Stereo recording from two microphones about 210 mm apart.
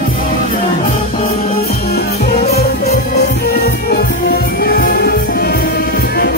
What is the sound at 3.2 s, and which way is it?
Music, 45° left (ahead or behind).